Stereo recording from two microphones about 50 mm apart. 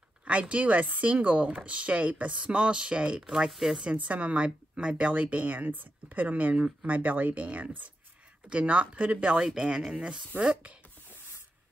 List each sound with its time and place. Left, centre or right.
0.2 s speech: right
3.3 s speech: centre
3.8 s a woman's voice: right